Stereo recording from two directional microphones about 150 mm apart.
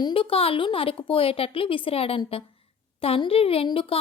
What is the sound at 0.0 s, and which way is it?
A woman's voice, 35° left (ahead or behind).